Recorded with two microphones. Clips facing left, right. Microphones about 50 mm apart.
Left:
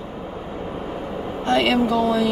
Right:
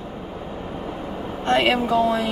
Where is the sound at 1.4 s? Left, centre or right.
Right.